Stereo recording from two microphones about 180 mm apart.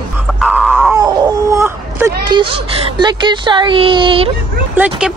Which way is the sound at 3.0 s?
25° right (ahead or behind).